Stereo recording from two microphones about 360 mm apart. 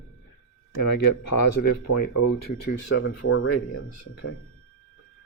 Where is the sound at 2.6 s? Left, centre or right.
Left.